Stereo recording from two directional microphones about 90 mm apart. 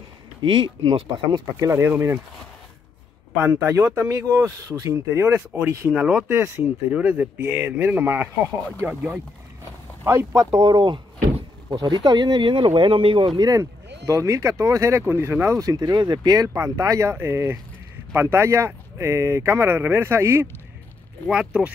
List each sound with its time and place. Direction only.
0.4 s speech: 60° right (ahead or behind)
1.9 s speech: 30° right (ahead or behind)
3.3 s speech: 25° right (ahead or behind)
5.9 s speech: 15° right (ahead or behind)
6.3 s speech: 25° right (ahead or behind)
10.6 s speech: 50° right (ahead or behind); by 13.3 s 75° right (ahead or behind)
13.4 s speech: 40° right (ahead or behind)
15.6 s speech: 50° right (ahead or behind); by 20.4 s 30° right (ahead or behind)
21.3 s speech: 10° right (ahead or behind)